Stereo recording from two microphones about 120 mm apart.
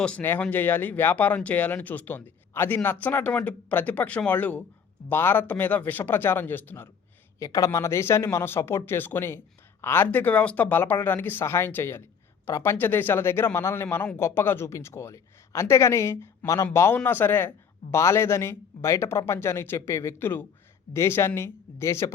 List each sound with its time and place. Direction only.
0.0 s speech: 15° left (ahead or behind)
7.3 s a man's voice: 25° left (ahead or behind)